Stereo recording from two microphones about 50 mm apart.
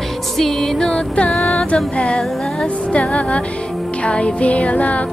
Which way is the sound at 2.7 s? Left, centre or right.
Left.